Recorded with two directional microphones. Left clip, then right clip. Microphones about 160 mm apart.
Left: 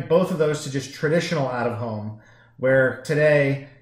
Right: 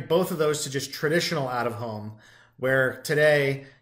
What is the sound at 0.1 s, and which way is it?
Speech, 20° right (ahead or behind).